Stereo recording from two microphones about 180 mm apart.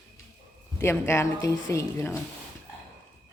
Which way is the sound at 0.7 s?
15° left (ahead or behind).